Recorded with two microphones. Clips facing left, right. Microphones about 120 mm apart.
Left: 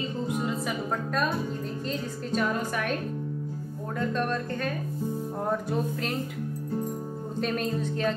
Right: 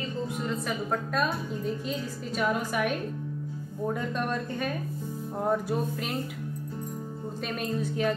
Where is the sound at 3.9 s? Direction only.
10° right (ahead or behind).